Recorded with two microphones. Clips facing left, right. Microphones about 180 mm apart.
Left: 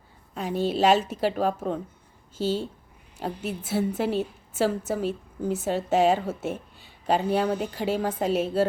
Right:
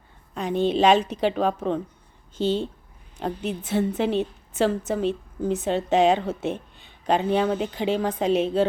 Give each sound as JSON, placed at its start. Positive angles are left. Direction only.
{"t": 0.3, "sound": "a woman's voice", "side_deg": 5}